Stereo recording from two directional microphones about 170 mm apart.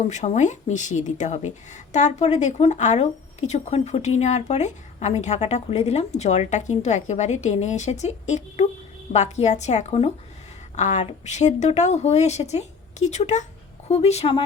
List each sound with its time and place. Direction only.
0.1 s a woman's voice: 45° left (ahead or behind)